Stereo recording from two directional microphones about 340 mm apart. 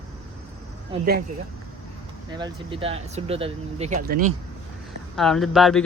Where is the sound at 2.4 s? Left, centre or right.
Centre.